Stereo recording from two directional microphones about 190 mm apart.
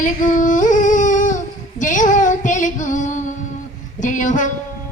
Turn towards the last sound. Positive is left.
turn(degrees=40)  # may be behind; listen again after turning